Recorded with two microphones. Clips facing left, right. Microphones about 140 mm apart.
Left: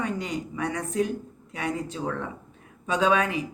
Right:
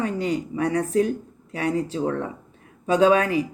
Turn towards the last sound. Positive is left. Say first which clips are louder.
# right 5 dB
turn(degrees=-35)  # may be behind; listen again after turning